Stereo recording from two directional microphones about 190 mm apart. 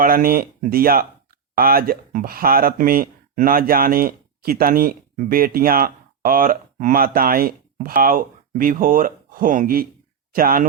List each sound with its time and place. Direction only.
0.0 s speech: 50° right (ahead or behind)